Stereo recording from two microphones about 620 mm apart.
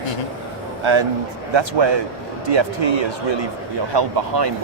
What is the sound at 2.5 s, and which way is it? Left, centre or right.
A man's voice, right.